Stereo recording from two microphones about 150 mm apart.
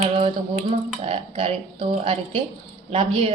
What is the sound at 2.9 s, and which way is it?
Speech, 40° right (ahead or behind).